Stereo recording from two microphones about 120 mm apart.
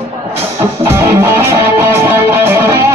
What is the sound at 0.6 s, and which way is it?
Music, 25° right (ahead or behind).